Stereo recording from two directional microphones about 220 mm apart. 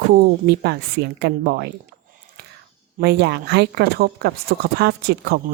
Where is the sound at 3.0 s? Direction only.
50° right (ahead or behind).